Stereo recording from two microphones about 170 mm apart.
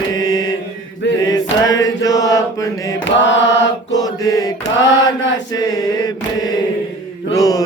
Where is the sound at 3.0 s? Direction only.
90° left.